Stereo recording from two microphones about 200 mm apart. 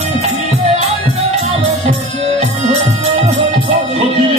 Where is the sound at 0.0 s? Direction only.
35° right (ahead or behind).